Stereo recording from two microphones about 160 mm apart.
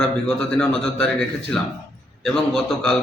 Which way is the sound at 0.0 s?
5° left (ahead or behind).